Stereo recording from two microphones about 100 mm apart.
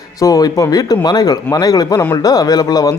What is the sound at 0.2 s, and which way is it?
Speech, 35° left (ahead or behind).